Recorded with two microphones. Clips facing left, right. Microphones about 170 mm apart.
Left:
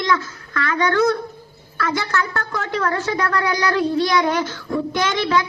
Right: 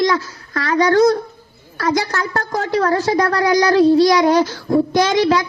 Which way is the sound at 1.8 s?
40° right (ahead or behind).